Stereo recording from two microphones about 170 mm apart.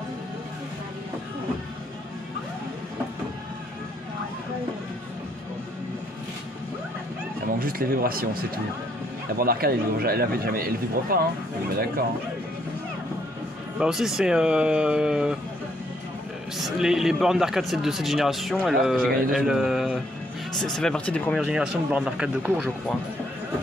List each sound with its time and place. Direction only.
7.5 s a man's voice: 60° right (ahead or behind)
13.7 s speech: 5° right (ahead or behind)
16.5 s speech: centre (ahead or behind)
21.5 s speech: 5° right (ahead or behind)